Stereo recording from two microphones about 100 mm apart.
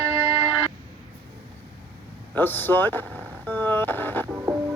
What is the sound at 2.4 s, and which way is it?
Speech, 20° left (ahead or behind).